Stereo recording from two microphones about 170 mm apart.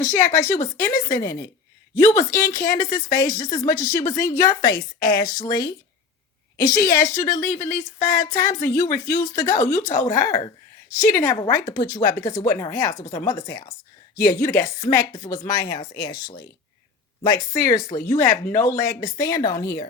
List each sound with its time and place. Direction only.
0.3 s a woman's voice: 15° left (ahead or behind)
2.7 s speech: 50° left (ahead or behind)
3.1 s a woman's voice: 20° left (ahead or behind)
7.4 s speech: 45° left (ahead or behind)
8.0 s a woman's voice: 20° left (ahead or behind)
16.2 s speech: 60° left (ahead or behind)
17.5 s a woman's voice: 20° left (ahead or behind)